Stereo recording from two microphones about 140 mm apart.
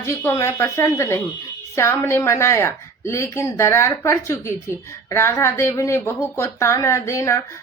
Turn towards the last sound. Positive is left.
turn(degrees=20)  # may be behind; listen again after turning